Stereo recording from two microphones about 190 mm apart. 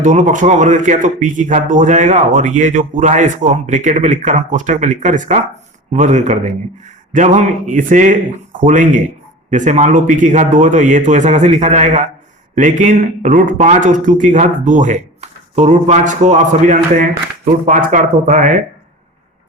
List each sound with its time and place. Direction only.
0.0 s a man's voice: 40° right (ahead or behind)